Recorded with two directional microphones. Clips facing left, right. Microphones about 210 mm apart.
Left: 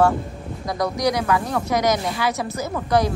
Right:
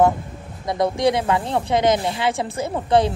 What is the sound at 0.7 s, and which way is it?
Speech, 25° right (ahead or behind).